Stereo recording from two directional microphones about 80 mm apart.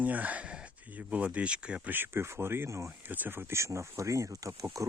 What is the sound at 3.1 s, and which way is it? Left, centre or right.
Speech, right.